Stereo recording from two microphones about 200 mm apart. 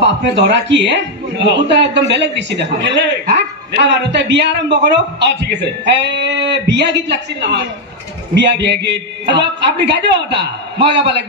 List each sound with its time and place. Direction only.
0.0 s a man's voice: 60° right (ahead or behind)